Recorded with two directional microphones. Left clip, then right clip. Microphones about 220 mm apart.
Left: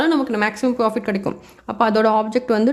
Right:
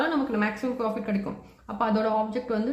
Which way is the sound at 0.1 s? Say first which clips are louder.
Left 8 dB; 50° left (ahead or behind).